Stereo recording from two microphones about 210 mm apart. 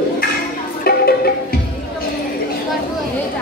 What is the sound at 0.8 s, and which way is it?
Music, 45° left (ahead or behind).